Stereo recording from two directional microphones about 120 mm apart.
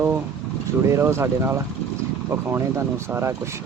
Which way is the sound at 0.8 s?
25° right (ahead or behind).